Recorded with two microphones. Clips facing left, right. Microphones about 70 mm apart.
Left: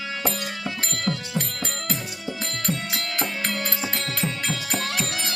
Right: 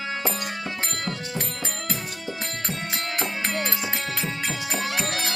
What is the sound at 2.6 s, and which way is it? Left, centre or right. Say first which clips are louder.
Music: left 3 dB; right.